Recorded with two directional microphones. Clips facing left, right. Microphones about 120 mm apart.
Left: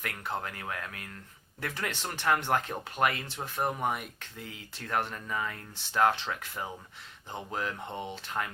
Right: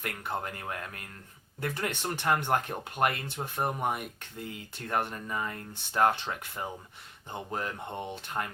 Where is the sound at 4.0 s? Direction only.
50° right (ahead or behind).